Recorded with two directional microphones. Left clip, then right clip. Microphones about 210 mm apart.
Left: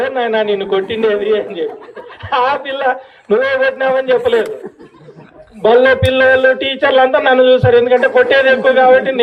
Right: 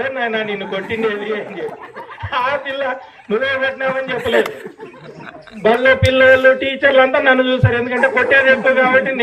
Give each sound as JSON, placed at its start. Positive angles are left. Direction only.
{"t": 0.0, "sound": "a man's voice", "side_deg": 30}
{"t": 5.6, "sound": "a man's voice", "side_deg": 30}